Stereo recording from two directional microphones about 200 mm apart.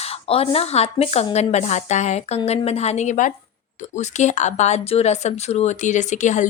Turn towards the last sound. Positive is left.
turn(degrees=35)  # may be behind; listen again after turning